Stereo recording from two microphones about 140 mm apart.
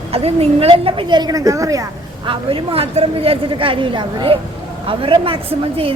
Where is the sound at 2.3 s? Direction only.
40° right (ahead or behind).